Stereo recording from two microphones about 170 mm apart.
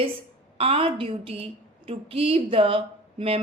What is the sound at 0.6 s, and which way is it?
A woman's voice, 35° right (ahead or behind).